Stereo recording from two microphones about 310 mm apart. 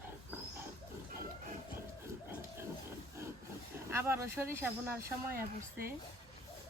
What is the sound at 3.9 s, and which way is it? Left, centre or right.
Speech, centre.